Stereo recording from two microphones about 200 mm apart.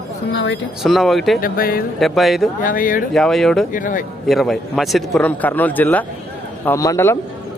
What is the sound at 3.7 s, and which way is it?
Speech, 40° left (ahead or behind).